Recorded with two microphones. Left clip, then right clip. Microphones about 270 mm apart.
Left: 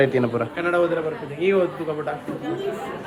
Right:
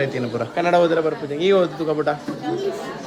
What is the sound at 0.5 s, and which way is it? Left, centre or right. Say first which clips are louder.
A woman's voice: right 7 dB; right.